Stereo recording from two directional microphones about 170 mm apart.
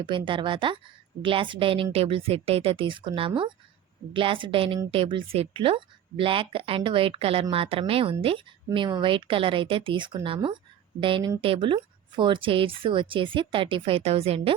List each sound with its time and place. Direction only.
0.1 s a woman's voice: 30° right (ahead or behind)